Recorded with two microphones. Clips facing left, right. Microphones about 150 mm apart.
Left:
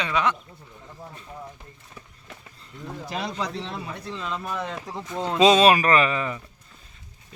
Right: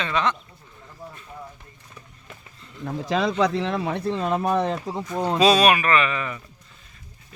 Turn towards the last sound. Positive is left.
turn(degrees=30)  # may be behind; listen again after turning